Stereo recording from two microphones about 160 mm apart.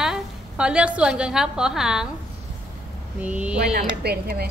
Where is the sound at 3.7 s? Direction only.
75° right (ahead or behind).